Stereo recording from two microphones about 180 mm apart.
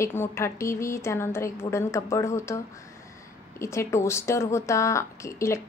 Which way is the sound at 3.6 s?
15° left (ahead or behind).